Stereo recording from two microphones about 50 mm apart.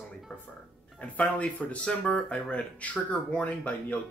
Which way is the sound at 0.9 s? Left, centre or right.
Left.